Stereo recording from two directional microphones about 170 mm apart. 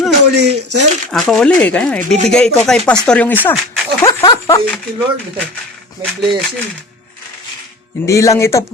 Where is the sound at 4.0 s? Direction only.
25° left (ahead or behind).